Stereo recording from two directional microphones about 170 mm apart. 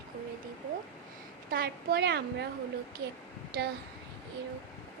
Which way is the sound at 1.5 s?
65° right (ahead or behind).